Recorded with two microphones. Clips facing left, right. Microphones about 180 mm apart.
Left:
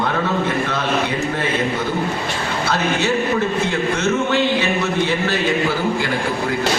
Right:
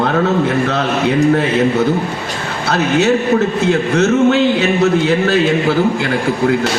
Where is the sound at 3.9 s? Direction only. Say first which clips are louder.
Right 9 dB; 65° right (ahead or behind).